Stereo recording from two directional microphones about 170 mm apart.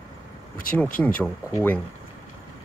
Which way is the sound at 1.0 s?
10° left (ahead or behind).